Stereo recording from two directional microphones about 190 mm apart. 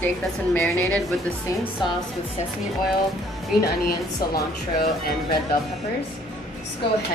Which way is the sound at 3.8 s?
50° left (ahead or behind).